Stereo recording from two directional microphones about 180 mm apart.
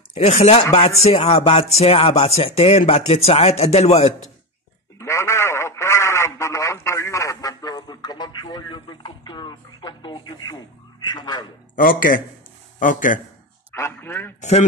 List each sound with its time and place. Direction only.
0.1 s speech: 35° left (ahead or behind)
4.9 s radio: 15° left (ahead or behind)
11.1 s a man's voice: 25° left (ahead or behind)
11.7 s speech: 50° left (ahead or behind)
13.7 s a man's voice: 15° left (ahead or behind)